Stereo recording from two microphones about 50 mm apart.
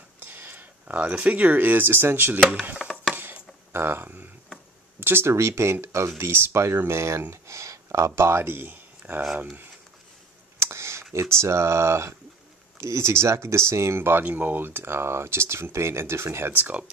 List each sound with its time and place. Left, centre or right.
0.2 s a sound: right
1.1 s speech: right
2.8 s a sound: centre
3.7 s speech: right
5.3 s speech: right
6.1 s speech: right
7.4 s speech: right
8.6 s a sound: right
10.6 s a sound: right
11.3 s speech: right
14.2 s speech: right
16.5 s speech: right